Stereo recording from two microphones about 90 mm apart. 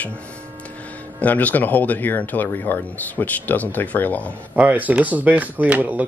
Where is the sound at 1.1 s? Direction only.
20° left (ahead or behind).